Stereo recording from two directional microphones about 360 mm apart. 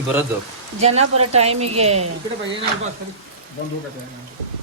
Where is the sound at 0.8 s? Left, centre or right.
Centre.